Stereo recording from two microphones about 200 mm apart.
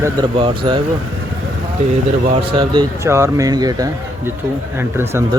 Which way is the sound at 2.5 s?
25° right (ahead or behind).